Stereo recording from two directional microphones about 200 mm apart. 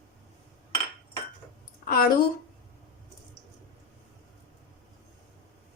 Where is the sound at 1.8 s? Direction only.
45° left (ahead or behind).